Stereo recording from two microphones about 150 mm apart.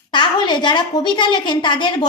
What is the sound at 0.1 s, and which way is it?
A woman's voice, 30° left (ahead or behind).